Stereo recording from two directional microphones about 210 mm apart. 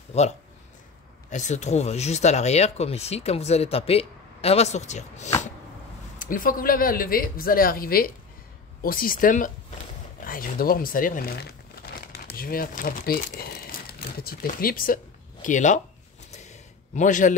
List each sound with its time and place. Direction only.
0.1 s speech: 30° left (ahead or behind)
1.3 s speech: 35° left (ahead or behind)
11.8 s crumpling: 50° left (ahead or behind)
14.2 s speech: 45° left (ahead or behind)
16.3 s a sound: 35° left (ahead or behind)